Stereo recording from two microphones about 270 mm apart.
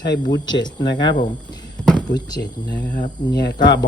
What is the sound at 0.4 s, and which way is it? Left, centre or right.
Speech, centre.